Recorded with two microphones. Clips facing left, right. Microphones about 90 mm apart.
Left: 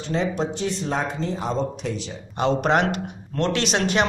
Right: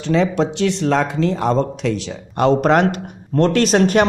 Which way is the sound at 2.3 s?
50° right (ahead or behind).